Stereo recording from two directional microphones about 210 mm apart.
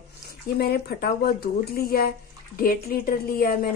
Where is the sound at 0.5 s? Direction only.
50° left (ahead or behind).